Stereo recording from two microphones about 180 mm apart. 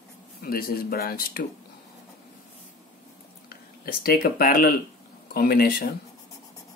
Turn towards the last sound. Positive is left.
turn(degrees=60)  # may be behind; listen again after turning